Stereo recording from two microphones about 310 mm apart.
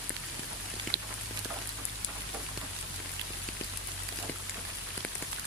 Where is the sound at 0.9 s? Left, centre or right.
Right.